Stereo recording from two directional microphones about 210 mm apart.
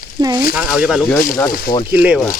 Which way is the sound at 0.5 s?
5° right (ahead or behind).